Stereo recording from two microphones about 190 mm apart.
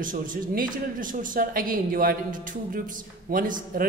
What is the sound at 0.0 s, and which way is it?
A woman's voice, 45° right (ahead or behind).